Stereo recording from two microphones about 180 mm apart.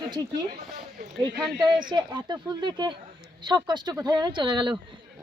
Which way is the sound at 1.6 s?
25° right (ahead or behind).